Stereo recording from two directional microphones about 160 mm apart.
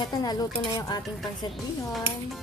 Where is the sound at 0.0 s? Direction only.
25° left (ahead or behind).